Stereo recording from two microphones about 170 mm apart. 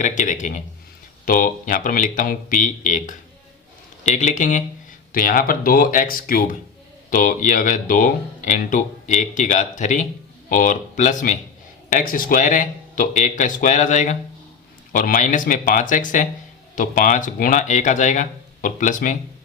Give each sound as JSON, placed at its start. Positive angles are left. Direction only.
{"t": 0.0, "sound": "speech", "side_deg": 50}